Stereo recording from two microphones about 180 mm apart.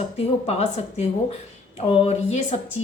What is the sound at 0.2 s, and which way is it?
A woman's voice, 35° left (ahead or behind).